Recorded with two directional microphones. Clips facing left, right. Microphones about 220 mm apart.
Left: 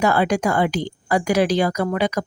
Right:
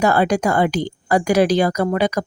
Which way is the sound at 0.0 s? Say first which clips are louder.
Right 2 dB; 40° right (ahead or behind).